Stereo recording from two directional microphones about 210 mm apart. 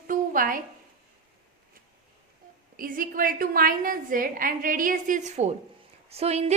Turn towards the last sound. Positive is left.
turn(degrees=-30)  # may be behind; listen again after turning